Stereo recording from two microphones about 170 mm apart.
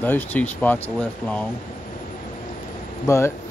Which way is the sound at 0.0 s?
10° left (ahead or behind).